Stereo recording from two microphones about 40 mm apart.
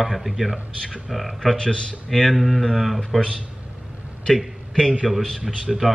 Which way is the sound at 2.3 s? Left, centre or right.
Centre.